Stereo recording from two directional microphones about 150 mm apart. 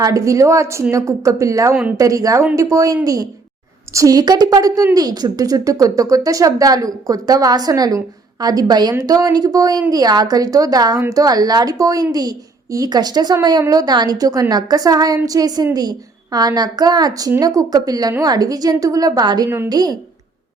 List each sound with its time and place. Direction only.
0.0 s a woman's voice: 20° right (ahead or behind)